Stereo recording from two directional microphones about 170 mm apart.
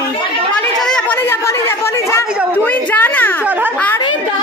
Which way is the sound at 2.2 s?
5° right (ahead or behind).